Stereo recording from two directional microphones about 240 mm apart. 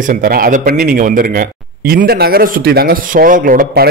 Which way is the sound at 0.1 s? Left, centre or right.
Right.